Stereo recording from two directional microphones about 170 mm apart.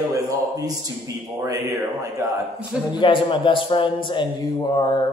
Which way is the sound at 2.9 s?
30° left (ahead or behind).